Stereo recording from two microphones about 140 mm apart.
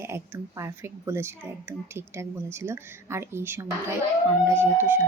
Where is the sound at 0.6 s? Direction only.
20° right (ahead or behind).